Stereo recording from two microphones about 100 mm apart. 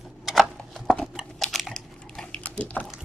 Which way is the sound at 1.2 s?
Centre (ahead or behind).